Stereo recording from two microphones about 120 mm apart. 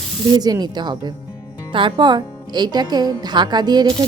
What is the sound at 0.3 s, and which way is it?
Speech, 35° right (ahead or behind).